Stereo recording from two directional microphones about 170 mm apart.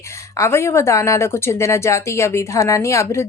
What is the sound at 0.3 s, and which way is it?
A woman's voice, 15° left (ahead or behind).